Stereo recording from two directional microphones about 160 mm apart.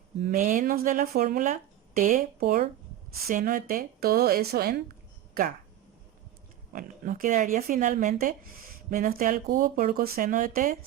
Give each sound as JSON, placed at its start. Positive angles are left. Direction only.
{"t": 0.3, "sound": "a woman's voice", "side_deg": -55}
{"t": 6.7, "sound": "speech", "side_deg": -55}